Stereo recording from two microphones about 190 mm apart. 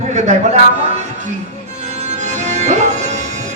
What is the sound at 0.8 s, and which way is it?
Music, 35° right (ahead or behind).